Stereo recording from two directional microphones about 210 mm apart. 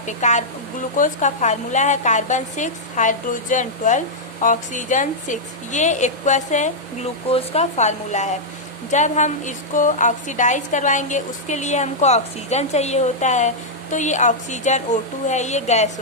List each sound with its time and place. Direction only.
0.2 s a woman's voice: 35° left (ahead or behind)